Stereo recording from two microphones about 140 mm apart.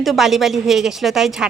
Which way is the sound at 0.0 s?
Centre (ahead or behind).